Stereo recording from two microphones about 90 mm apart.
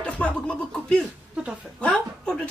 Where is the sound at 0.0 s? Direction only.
10° left (ahead or behind).